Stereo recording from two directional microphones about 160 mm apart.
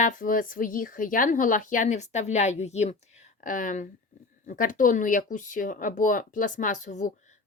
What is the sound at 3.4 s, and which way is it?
Speech, 55° left (ahead or behind).